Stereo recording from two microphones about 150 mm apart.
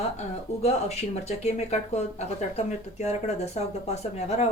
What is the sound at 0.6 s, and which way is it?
Speech, 45° left (ahead or behind).